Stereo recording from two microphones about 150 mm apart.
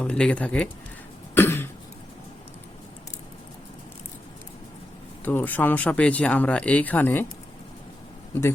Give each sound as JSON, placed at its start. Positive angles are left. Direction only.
{"t": 0.0, "sound": "speech", "side_deg": 5}
{"t": 1.4, "sound": "cough", "side_deg": 15}
{"t": 5.2, "sound": "speech", "side_deg": 10}